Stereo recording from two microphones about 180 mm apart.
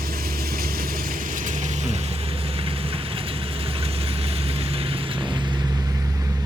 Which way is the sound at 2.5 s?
30° right (ahead or behind).